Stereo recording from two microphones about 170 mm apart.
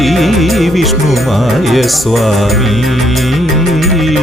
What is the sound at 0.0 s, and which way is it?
Music, centre (ahead or behind).